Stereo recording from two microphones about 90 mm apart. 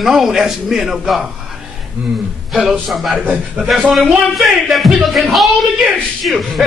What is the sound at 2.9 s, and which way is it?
Music, centre (ahead or behind).